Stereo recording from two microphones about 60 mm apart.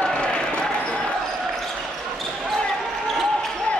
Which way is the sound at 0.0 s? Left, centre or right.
Centre.